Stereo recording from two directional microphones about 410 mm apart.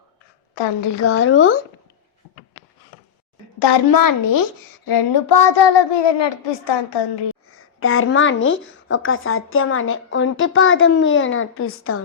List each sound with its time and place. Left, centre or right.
0.9 s speech: left
3.6 s a child's voice: left
4.9 s speech: left
7.8 s speech: left